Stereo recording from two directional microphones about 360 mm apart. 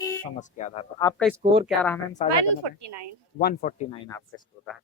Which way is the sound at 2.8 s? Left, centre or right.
Right.